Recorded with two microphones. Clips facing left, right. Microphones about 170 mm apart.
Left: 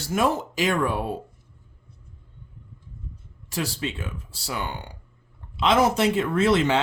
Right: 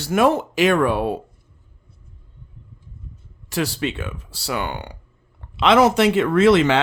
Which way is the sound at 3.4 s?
70° right (ahead or behind).